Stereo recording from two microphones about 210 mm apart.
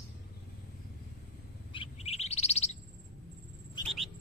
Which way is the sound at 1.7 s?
25° left (ahead or behind).